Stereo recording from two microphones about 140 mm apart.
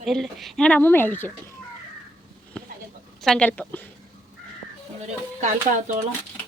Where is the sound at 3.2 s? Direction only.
5° left (ahead or behind).